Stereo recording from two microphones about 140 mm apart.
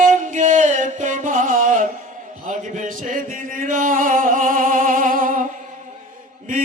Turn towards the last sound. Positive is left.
turn(degrees=-75)  # may be behind; listen again after turning